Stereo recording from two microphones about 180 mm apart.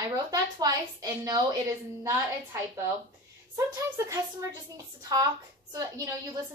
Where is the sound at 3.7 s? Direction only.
15° right (ahead or behind).